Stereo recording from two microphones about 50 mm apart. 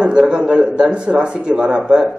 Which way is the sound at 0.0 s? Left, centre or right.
Centre.